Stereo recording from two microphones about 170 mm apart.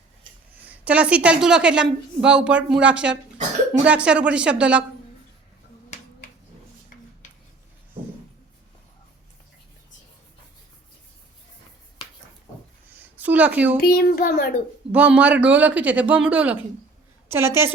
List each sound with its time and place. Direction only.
0.6 s a woman's voice: 10° right (ahead or behind)
13.1 s a sound: 10° right (ahead or behind)
13.9 s a child's voice: 65° left (ahead or behind)
14.9 s a woman's voice: 10° right (ahead or behind)